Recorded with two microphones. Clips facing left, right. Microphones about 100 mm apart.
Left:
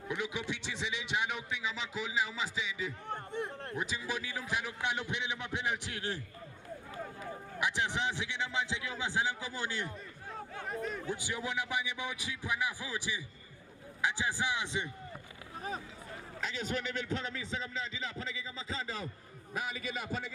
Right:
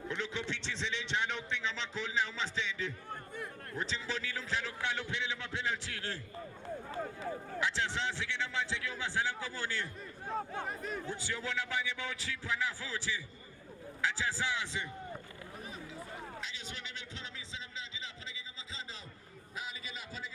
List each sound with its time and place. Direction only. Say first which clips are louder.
0.1 s a man's voice: left 2 dB; 10° left (ahead or behind)
3.1 s a man's voice: left 5 dB; 25° left (ahead or behind)
3.8 s a man's voice: even; 10° left (ahead or behind)
7.6 s a man's voice: left 2 dB; 15° left (ahead or behind)
10.7 s a man's voice: left 2 dB; centre (ahead or behind)
11.0 s a man's voice: left 2 dB; 15° left (ahead or behind)
16.4 s a man's voice: left 9 dB; 50° left (ahead or behind)